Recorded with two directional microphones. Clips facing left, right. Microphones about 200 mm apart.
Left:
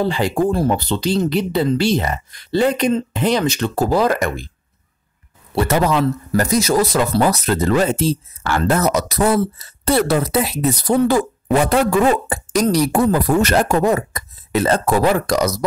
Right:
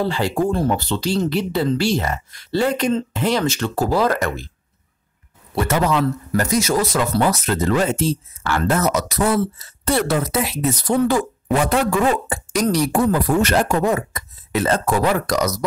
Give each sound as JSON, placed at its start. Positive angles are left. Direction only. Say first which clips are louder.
{"t": 0.0, "sound": "speech", "louder": "left 2 dB", "side_deg": 15}
{"t": 5.5, "sound": "a man's voice", "louder": "left 2 dB", "side_deg": 35}